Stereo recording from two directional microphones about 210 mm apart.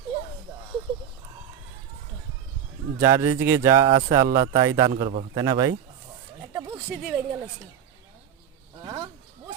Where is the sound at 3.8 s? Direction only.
25° right (ahead or behind).